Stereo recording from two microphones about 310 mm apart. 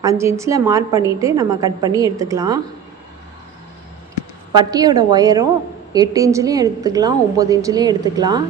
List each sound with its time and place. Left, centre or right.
0.0 s a woman's voice: centre
4.5 s a woman's voice: centre